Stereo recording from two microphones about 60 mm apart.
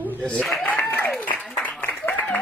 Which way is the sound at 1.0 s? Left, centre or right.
Left.